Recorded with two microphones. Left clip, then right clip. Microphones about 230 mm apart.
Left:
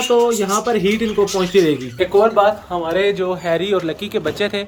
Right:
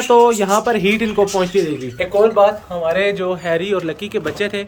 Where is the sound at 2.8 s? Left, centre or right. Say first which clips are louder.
Right 1 dB; centre.